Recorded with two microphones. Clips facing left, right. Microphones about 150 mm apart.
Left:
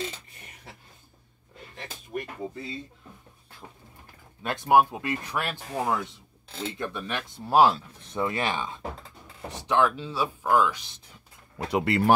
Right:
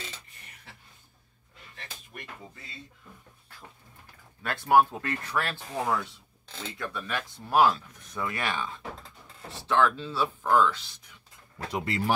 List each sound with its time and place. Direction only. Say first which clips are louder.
2.1 s music: left 13 dB; 30° left (ahead or behind)
4.4 s speech: left 1 dB; 20° left (ahead or behind)
11.5 s speech: left 6 dB; 65° left (ahead or behind)